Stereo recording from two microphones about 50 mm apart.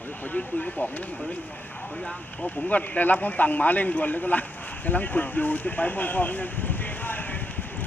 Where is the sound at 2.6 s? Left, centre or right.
Left.